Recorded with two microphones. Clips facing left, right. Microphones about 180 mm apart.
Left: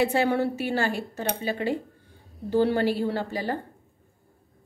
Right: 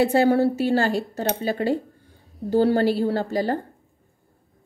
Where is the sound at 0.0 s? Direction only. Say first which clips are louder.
Right 5 dB; 40° right (ahead or behind).